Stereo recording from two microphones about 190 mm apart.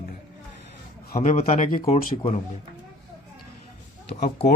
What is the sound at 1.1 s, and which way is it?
Speech, 35° left (ahead or behind).